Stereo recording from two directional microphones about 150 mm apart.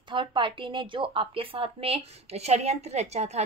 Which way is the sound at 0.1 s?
35° right (ahead or behind).